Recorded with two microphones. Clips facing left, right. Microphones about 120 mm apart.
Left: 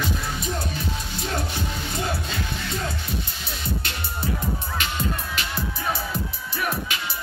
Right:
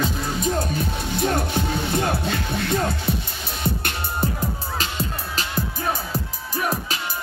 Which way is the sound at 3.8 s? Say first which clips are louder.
Right 4 dB; 45° right (ahead or behind).